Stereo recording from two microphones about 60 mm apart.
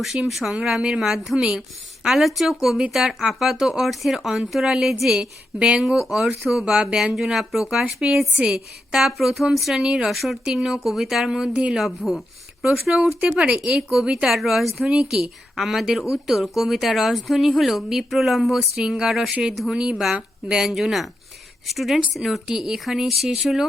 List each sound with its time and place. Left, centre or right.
0.0 s a woman's voice: centre
5.5 s speech: right
5.8 s a woman's voice: centre
11.8 s a woman's voice: centre
12.6 s a woman's voice: centre